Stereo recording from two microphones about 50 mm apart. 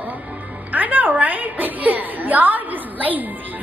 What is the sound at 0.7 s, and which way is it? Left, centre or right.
A woman's voice, right.